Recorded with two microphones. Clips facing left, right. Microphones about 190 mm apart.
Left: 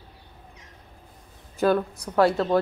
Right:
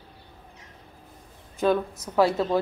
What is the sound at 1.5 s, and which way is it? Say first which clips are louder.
Speech: left 1 dB; 5° left (ahead or behind).